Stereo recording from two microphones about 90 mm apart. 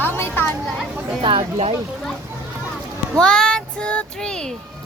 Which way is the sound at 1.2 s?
70° right (ahead or behind).